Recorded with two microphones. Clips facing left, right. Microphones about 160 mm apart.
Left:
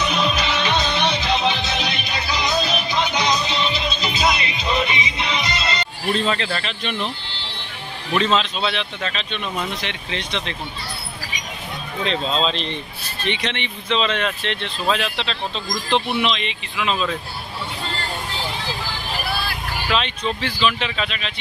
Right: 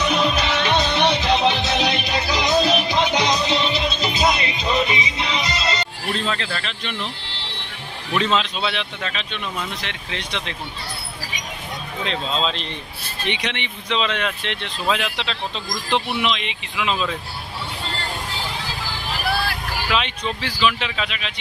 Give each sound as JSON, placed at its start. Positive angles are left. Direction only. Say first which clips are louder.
{"t": 0.1, "sound": "music", "louder": "right 1 dB", "side_deg": -55}
{"t": 6.2, "sound": "speech", "louder": "left 3 dB", "side_deg": 5}
{"t": 8.2, "sound": "speech", "louder": "left 1 dB", "side_deg": -10}
{"t": 12.0, "sound": "speech", "louder": "left 3 dB", "side_deg": -5}
{"t": 20.4, "sound": "speech", "louder": "right 2 dB", "side_deg": -10}